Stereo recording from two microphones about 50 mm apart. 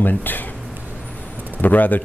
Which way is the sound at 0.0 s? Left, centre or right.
Left.